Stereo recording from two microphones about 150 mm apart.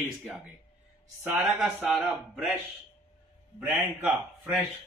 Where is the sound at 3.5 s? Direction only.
15° right (ahead or behind).